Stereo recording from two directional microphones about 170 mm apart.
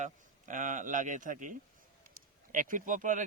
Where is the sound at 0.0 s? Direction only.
50° right (ahead or behind).